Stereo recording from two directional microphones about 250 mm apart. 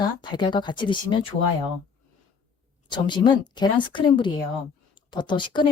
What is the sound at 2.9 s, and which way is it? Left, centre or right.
Speech, centre.